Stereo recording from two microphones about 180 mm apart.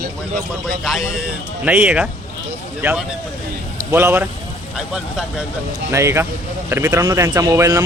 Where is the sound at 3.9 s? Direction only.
10° right (ahead or behind).